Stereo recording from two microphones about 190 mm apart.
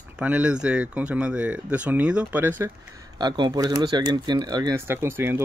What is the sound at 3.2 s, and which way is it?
Speech, 20° right (ahead or behind).